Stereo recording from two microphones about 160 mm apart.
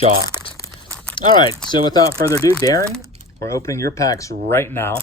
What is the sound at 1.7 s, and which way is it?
Speech, 25° left (ahead or behind).